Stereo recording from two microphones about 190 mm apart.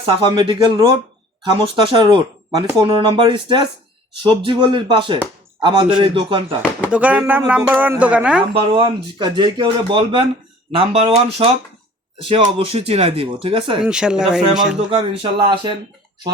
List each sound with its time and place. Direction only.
0.0 s a man's voice: 25° right (ahead or behind)
6.6 s speech: 5° right (ahead or behind)
8.7 s speech: 25° right (ahead or behind)
13.8 s speech: 5° right (ahead or behind)
14.8 s speech: 25° right (ahead or behind)